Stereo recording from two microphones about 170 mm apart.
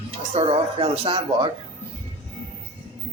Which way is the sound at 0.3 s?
35° right (ahead or behind).